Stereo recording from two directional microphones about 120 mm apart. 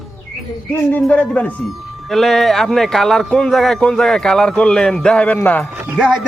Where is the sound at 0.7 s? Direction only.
10° left (ahead or behind).